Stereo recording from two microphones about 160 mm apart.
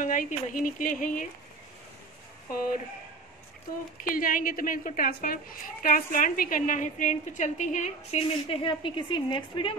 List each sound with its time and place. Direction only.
0.0 s a woman's voice: 55° left (ahead or behind)
4.0 s a woman's voice: 60° left (ahead or behind)
8.6 s a woman's voice: 30° left (ahead or behind)